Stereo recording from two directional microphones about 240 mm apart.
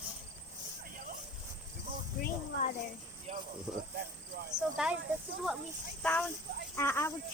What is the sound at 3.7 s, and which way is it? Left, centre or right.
Speech, centre.